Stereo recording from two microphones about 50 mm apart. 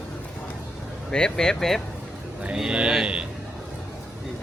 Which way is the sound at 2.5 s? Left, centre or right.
Centre.